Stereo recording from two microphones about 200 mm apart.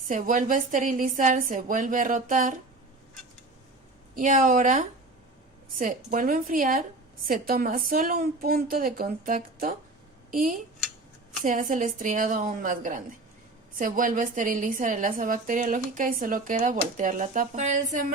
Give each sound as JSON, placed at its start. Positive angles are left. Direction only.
{"t": 0.1, "sound": "a woman's voice", "side_deg": -40}
{"t": 4.1, "sound": "a woman's voice", "side_deg": -45}
{"t": 5.8, "sound": "a woman's voice", "side_deg": -40}